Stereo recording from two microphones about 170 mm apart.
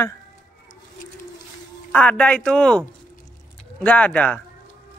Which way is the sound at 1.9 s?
10° left (ahead or behind).